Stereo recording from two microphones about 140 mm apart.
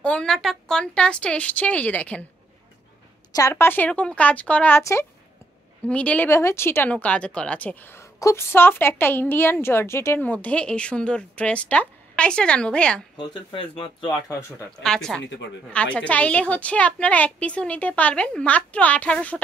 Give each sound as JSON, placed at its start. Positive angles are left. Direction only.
{"t": 0.0, "sound": "speech", "side_deg": 5}
{"t": 3.3, "sound": "speech", "side_deg": 20}
{"t": 13.2, "sound": "speech", "side_deg": 35}
{"t": 14.8, "sound": "speech", "side_deg": 5}